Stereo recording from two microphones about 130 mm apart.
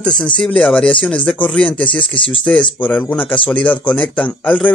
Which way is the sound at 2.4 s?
10° left (ahead or behind).